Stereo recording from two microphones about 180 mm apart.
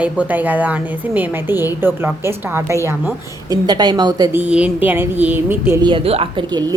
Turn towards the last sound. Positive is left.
turn(degrees=-30)  # may be behind; listen again after turning